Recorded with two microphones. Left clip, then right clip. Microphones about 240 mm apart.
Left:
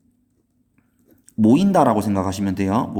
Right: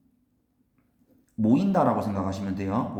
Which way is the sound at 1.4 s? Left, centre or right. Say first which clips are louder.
Left 7 dB; left.